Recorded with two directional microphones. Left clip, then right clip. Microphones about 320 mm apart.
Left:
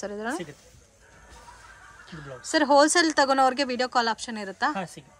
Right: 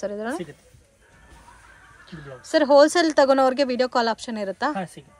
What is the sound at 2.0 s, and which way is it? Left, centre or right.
Speech, centre.